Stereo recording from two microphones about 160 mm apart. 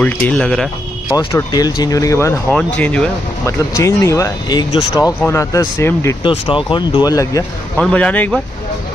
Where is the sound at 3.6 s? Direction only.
20° left (ahead or behind).